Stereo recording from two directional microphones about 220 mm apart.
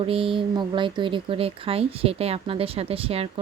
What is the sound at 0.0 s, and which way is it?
Speech, 25° right (ahead or behind).